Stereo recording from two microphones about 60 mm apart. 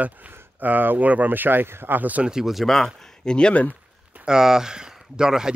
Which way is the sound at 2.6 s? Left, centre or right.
Centre.